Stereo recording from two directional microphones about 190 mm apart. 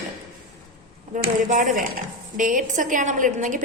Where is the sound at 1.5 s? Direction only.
45° right (ahead or behind).